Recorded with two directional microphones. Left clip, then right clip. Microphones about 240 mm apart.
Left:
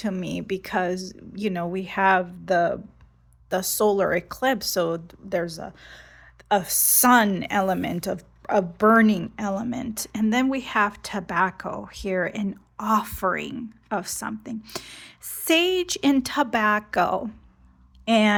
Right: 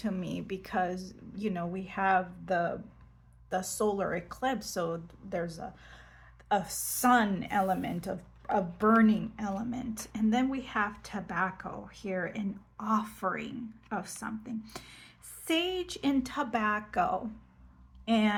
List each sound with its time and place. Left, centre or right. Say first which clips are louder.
0.0 s a woman's voice: left 7 dB; left